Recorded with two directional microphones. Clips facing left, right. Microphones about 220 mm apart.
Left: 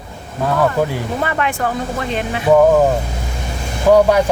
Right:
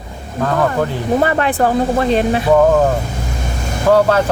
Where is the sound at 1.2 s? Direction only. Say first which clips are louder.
Right 3 dB; 35° right (ahead or behind).